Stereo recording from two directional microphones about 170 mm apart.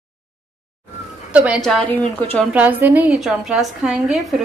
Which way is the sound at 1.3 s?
5° right (ahead or behind).